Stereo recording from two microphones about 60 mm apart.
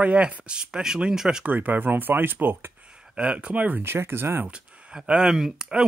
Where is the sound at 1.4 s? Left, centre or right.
Right.